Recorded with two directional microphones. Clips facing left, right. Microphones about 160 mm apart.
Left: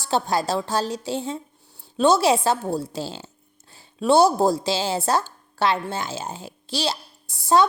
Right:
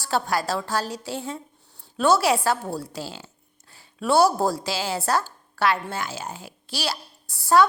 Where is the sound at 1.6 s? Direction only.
10° left (ahead or behind).